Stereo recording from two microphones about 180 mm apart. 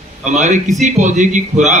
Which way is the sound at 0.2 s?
40° right (ahead or behind).